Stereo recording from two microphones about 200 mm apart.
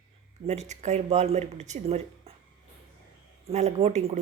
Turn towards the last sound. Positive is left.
turn(degrees=-35)  # may be behind; listen again after turning